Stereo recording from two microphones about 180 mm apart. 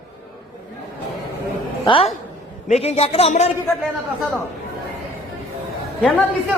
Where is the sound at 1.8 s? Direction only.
30° left (ahead or behind).